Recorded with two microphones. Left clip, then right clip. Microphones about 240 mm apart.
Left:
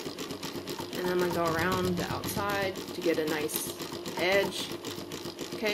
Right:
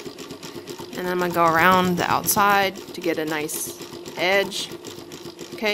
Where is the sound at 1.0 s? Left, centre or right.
Right.